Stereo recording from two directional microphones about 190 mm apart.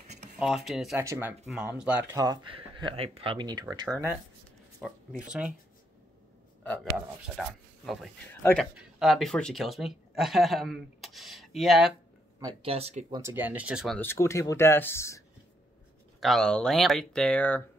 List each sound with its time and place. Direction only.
0.4 s speech: centre (ahead or behind)
0.9 s speech: 15° right (ahead or behind)
1.5 s speech: 5° right (ahead or behind)
2.1 s speech: 20° right (ahead or behind)
6.6 s speech: 5° left (ahead or behind)
8.4 s speech: 10° left (ahead or behind)
8.7 s speech: centre (ahead or behind)
12.4 s speech: 25° right (ahead or behind)
13.2 s speech: 10° right (ahead or behind)
13.9 s speech: 15° left (ahead or behind)
16.2 s speech: centre (ahead or behind)